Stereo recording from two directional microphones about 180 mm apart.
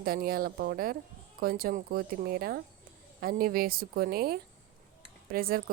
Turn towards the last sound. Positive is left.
turn(degrees=-55)  # may be behind; listen again after turning